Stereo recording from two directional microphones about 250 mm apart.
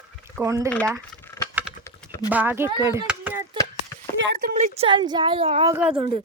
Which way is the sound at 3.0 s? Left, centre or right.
Centre.